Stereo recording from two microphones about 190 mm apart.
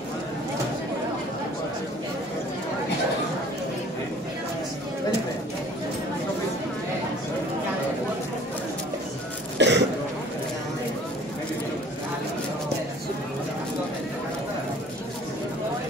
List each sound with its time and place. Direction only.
9.6 s cough: 65° right (ahead or behind)